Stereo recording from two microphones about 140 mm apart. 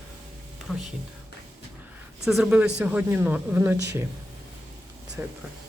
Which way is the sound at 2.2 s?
5° right (ahead or behind).